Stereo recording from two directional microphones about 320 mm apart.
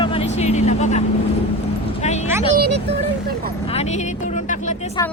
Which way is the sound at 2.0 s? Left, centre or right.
Left.